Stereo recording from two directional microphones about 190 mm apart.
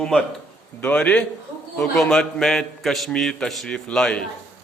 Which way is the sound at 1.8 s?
Centre (ahead or behind).